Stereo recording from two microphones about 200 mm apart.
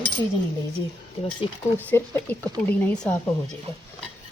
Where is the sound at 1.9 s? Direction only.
10° left (ahead or behind).